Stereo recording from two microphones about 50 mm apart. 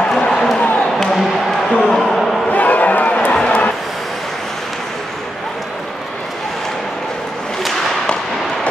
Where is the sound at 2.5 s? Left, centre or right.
Left.